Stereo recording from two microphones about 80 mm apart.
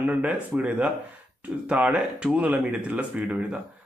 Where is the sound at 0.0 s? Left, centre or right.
Centre.